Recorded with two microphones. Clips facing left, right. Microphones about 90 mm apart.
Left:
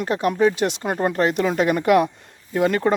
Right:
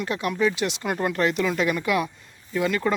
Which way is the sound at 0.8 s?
35° left (ahead or behind).